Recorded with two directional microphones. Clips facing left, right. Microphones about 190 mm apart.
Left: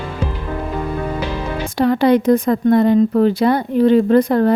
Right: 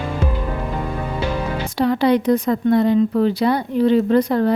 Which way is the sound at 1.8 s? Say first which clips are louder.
Left 3 dB; 50° left (ahead or behind).